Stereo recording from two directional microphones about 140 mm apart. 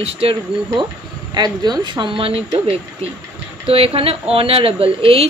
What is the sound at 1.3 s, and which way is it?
Speech, 30° right (ahead or behind).